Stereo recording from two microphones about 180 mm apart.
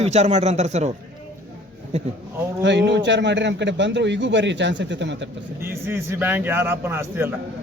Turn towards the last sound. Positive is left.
turn(degrees=-15)  # may be behind; listen again after turning